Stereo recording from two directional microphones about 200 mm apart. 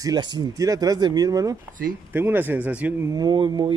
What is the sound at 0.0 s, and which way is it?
Speech, 20° right (ahead or behind).